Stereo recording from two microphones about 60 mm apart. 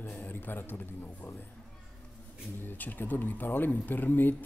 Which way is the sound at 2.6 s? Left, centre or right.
Left.